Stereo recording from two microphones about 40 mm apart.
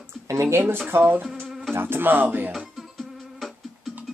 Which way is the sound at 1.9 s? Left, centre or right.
Right.